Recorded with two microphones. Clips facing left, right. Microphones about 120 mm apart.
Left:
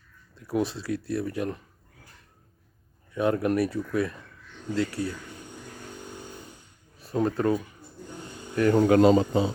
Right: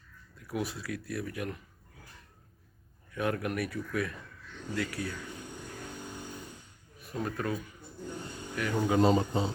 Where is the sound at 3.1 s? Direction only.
25° left (ahead or behind).